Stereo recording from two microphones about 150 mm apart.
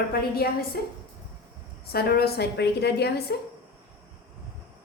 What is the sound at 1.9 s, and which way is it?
A woman's voice, 90° left.